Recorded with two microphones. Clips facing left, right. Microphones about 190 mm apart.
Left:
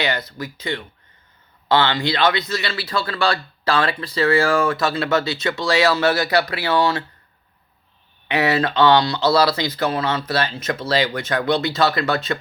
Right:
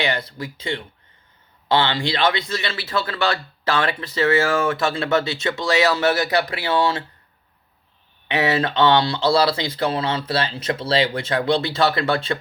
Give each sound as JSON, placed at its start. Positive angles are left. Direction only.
{"t": 0.0, "sound": "speech", "side_deg": -25}
{"t": 8.3, "sound": "speech", "side_deg": -20}